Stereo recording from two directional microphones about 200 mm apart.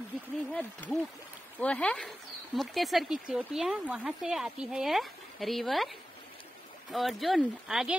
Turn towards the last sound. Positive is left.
turn(degrees=0)  # may be behind; listen again after turning